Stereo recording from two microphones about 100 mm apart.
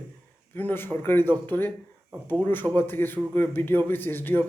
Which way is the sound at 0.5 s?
20° left (ahead or behind).